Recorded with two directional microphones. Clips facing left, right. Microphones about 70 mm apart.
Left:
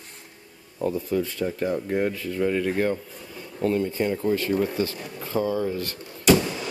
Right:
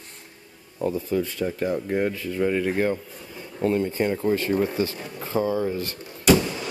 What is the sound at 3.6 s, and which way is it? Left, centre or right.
Speech, right.